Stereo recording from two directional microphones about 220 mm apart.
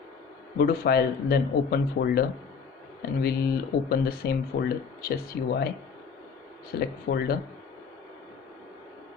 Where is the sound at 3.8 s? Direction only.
45° left (ahead or behind).